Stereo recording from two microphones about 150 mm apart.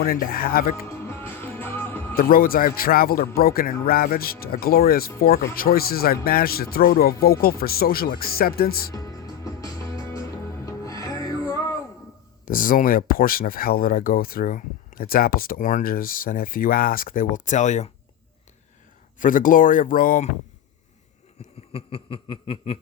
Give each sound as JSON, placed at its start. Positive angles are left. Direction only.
{"t": 0.0, "sound": "speech", "side_deg": 75}
{"t": 0.9, "sound": "music", "side_deg": 15}
{"t": 2.1, "sound": "speech", "side_deg": 75}
{"t": 8.9, "sound": "music", "side_deg": 25}
{"t": 12.5, "sound": "speech", "side_deg": 65}
{"t": 19.2, "sound": "speech", "side_deg": 65}
{"t": 21.7, "sound": "snicker", "side_deg": 40}